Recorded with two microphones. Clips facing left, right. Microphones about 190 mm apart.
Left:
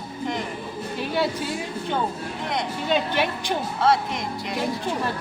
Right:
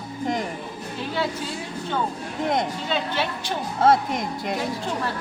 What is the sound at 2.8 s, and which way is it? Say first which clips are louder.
Speech: left 3 dB; 15° left (ahead or behind).